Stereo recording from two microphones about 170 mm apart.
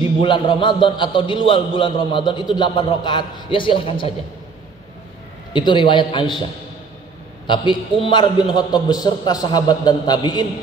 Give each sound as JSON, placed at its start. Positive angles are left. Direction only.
{"t": 0.2, "sound": "a man's voice", "side_deg": 30}
{"t": 5.5, "sound": "a man's voice", "side_deg": 25}
{"t": 7.4, "sound": "a man's voice", "side_deg": 30}